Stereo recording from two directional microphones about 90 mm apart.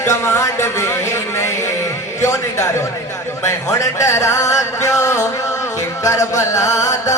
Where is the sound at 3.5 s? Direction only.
35° left (ahead or behind).